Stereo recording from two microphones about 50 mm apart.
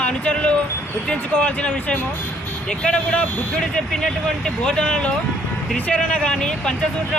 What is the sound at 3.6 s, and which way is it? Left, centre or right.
Speech, centre.